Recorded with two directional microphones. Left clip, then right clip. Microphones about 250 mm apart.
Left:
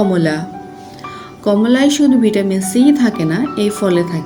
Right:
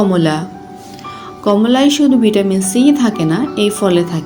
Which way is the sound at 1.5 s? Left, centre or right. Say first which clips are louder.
Right 1 dB; centre.